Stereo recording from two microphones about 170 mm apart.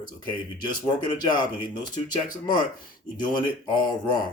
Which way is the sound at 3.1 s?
25° left (ahead or behind).